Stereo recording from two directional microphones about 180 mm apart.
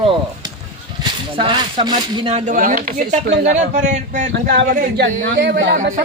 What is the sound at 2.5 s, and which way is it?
A man's voice, 50° right (ahead or behind).